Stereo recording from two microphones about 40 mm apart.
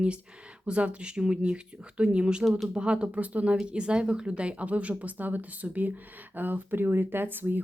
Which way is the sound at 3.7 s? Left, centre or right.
Right.